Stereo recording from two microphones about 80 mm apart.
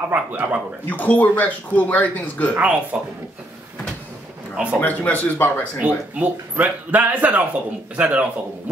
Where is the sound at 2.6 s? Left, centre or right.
Centre.